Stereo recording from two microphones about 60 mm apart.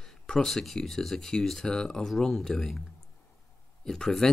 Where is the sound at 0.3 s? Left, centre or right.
Centre.